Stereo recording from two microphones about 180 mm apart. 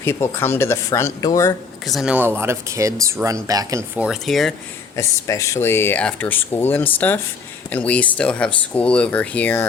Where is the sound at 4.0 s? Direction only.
Centre (ahead or behind).